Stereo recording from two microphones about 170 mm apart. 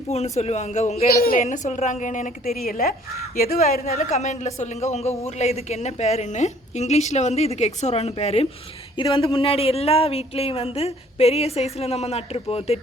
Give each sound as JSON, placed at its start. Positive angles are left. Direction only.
{"t": 0.1, "sound": "speech", "side_deg": 40}
{"t": 1.1, "sound": "a woman's voice", "side_deg": 60}
{"t": 3.8, "sound": "speech", "side_deg": 40}